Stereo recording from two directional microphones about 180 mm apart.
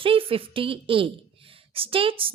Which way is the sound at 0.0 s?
30° right (ahead or behind).